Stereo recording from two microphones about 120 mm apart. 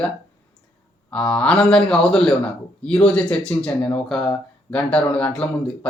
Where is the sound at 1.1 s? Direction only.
10° left (ahead or behind).